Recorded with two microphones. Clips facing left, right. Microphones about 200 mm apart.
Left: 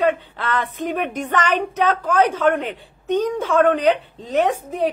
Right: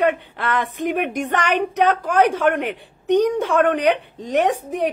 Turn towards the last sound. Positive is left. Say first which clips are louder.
# even
turn(degrees=-15)  # may be behind; listen again after turning